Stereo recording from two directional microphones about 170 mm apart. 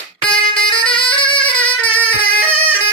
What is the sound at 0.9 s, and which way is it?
Music, 30° left (ahead or behind).